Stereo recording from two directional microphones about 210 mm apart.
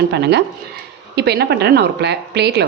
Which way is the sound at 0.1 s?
55° right (ahead or behind).